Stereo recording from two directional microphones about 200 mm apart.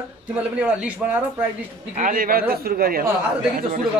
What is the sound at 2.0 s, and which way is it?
A man's voice, 45° right (ahead or behind).